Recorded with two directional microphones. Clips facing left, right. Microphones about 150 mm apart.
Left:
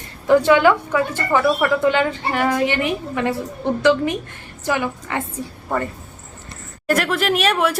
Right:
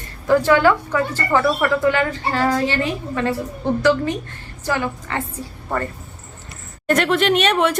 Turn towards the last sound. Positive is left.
turn(degrees=5)  # may be behind; listen again after turning